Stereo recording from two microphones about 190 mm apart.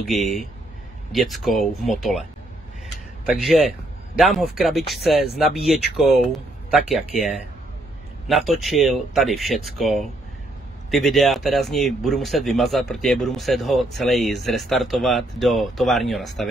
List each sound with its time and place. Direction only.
0.0 s speech: centre (ahead or behind)
3.3 s speech: centre (ahead or behind)